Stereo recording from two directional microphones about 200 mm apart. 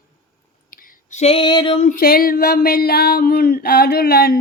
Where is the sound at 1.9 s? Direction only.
45° left (ahead or behind).